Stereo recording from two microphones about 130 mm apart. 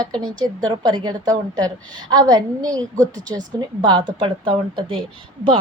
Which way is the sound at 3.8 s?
35° right (ahead or behind).